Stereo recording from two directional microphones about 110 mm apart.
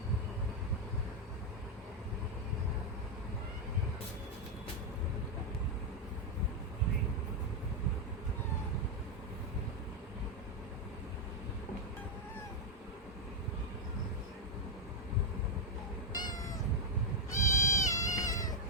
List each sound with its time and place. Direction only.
16.1 s cat: 40° left (ahead or behind)
17.4 s cat: 25° left (ahead or behind)